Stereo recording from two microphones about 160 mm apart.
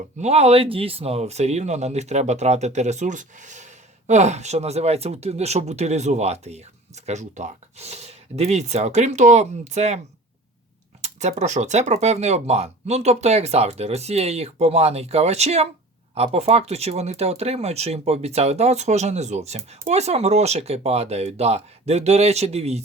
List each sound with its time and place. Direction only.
0.2 s speech: 40° right (ahead or behind)
11.0 s speech: 45° right (ahead or behind)